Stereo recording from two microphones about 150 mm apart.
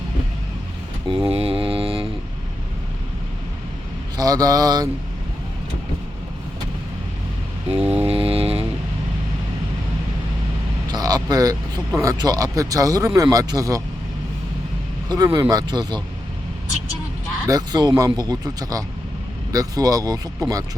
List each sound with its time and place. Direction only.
1.0 s mantra: 30° right (ahead or behind)
4.2 s speech: 25° right (ahead or behind)
7.8 s mantra: 10° right (ahead or behind)
8.0 s a sound: 40° right (ahead or behind)
10.8 s vehicle: 25° right (ahead or behind)
11.9 s speech: 25° right (ahead or behind)
15.1 s speech: 25° right (ahead or behind)
17.5 s speech: 30° right (ahead or behind)